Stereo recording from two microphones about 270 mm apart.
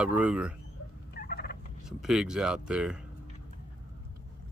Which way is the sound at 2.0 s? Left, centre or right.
Centre.